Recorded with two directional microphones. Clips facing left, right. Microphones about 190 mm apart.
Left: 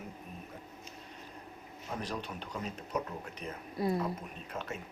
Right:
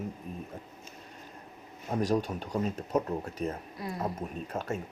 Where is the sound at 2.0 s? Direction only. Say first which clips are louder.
Right 13 dB; 40° right (ahead or behind).